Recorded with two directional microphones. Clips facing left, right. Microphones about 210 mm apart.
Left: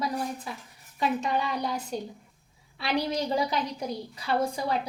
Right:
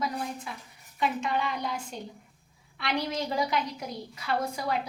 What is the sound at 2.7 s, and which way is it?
A woman's voice, 35° left (ahead or behind).